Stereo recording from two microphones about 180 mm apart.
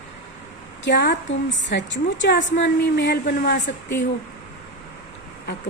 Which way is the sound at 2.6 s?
65° left (ahead or behind).